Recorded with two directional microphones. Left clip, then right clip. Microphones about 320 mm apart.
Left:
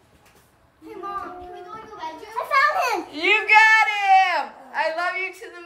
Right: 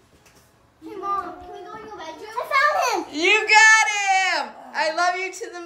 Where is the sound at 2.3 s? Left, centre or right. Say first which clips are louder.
Even; centre.